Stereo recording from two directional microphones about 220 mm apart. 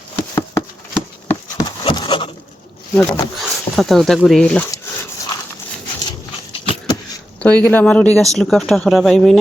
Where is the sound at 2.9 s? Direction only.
Centre (ahead or behind).